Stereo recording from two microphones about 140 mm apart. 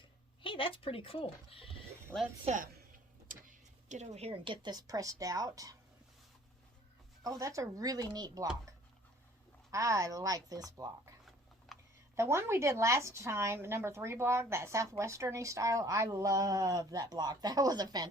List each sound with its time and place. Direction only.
0.4 s a woman's voice: 40° left (ahead or behind)
2.5 s a woman's voice: 50° right (ahead or behind)
3.2 s speech: 65° right (ahead or behind); by 5.7 s 25° right (ahead or behind)
7.3 s a woman's voice: 25° right (ahead or behind)
9.7 s a woman's voice: 25° right (ahead or behind)
11.7 s a sound: centre (ahead or behind)
12.1 s a woman's voice: 20° right (ahead or behind)